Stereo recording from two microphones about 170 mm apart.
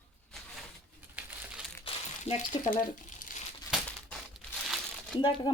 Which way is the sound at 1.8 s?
35° left (ahead or behind).